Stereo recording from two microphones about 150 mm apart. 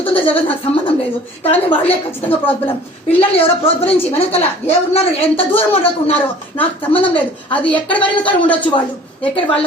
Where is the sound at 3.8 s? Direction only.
15° left (ahead or behind).